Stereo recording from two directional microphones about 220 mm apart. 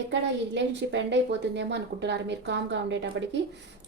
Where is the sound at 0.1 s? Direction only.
55° right (ahead or behind).